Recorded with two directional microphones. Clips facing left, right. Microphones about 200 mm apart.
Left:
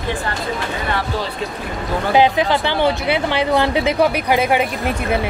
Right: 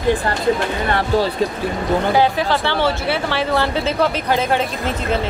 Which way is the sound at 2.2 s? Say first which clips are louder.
Left 2 dB; 20° left (ahead or behind).